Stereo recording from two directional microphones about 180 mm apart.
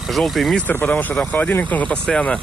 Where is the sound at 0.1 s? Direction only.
Centre (ahead or behind).